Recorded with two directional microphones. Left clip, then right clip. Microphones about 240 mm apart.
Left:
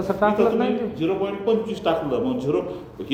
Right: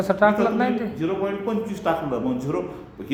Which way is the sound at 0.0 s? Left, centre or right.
Right.